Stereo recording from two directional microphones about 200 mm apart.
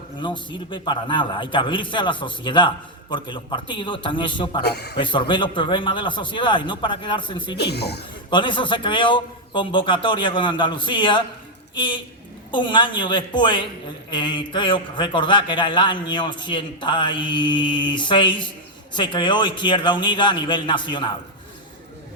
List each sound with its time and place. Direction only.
0.2 s a man's voice: 25° left (ahead or behind)
4.6 s speech: 55° left (ahead or behind)
4.9 s a man's voice: 25° left (ahead or behind)
7.5 s speech: 55° left (ahead or behind)
8.3 s a man's voice: 25° left (ahead or behind)